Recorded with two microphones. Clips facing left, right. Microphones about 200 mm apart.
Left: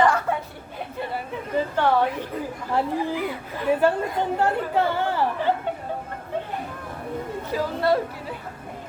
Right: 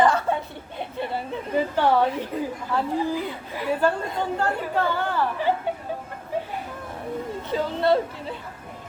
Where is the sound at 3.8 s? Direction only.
20° left (ahead or behind).